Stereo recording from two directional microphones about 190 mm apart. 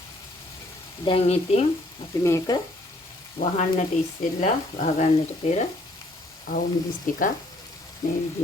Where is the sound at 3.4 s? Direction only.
30° left (ahead or behind).